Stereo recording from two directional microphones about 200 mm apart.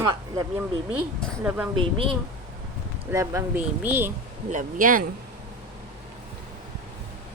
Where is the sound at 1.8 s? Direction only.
25° right (ahead or behind).